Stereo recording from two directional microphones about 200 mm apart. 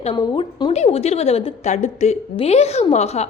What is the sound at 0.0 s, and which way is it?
A woman's voice, 25° left (ahead or behind).